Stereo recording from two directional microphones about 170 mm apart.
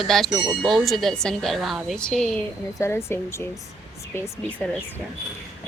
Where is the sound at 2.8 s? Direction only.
15° left (ahead or behind).